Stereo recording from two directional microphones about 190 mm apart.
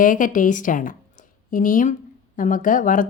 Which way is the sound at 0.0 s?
45° left (ahead or behind).